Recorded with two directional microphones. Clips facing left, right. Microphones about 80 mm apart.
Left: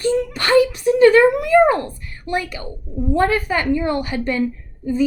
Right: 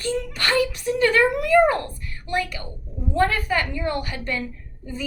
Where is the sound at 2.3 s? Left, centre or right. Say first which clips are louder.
Left 3 dB; centre.